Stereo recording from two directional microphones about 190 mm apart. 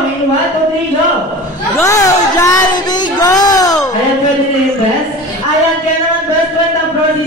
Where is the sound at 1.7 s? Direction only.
15° left (ahead or behind).